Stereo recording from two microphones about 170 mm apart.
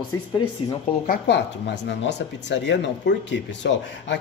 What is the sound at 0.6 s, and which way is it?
Speech, 35° left (ahead or behind).